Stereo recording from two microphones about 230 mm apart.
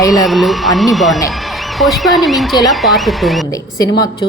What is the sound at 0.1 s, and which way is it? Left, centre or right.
Speech, centre.